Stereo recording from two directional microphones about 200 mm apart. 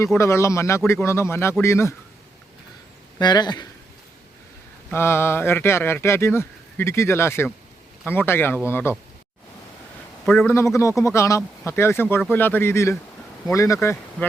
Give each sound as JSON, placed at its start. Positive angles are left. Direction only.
{"t": 0.2, "sound": "speech", "side_deg": 15}
{"t": 3.2, "sound": "a man's voice", "side_deg": 20}
{"t": 4.9, "sound": "speech", "side_deg": 10}
{"t": 10.2, "sound": "a man's voice", "side_deg": 0}
{"t": 10.5, "sound": "speech", "side_deg": 15}